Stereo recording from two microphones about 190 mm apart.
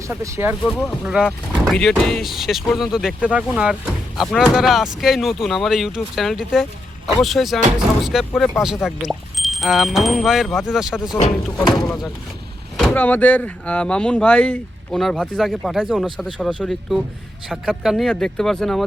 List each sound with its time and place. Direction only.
0.1 s speech: 10° right (ahead or behind)
0.6 s speech: 5° left (ahead or behind)
12.8 s speech: 10° left (ahead or behind)